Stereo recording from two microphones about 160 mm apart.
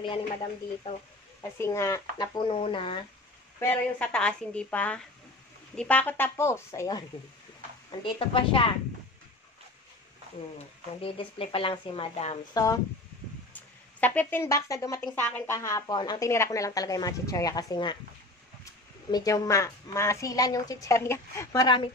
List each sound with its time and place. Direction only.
0.0 s speech: 30° left (ahead or behind)
1.6 s a woman's voice: 20° left (ahead or behind)
3.5 s a woman's voice: 10° left (ahead or behind)
7.9 s speech: 30° left (ahead or behind)
11.0 s speech: 35° left (ahead or behind)
13.5 s a woman's voice: 10° left (ahead or behind); by 17.9 s 25° left (ahead or behind)
19.0 s a woman's voice: 25° left (ahead or behind)